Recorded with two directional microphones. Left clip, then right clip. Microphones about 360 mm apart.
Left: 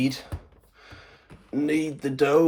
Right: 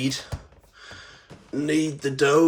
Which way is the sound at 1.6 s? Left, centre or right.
Centre.